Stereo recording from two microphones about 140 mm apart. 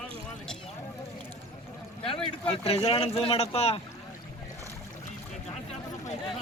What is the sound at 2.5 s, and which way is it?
Speech, 45° left (ahead or behind).